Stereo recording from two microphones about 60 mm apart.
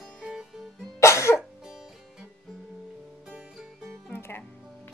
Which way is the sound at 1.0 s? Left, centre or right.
Left.